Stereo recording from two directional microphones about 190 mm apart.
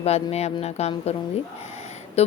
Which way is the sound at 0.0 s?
35° left (ahead or behind).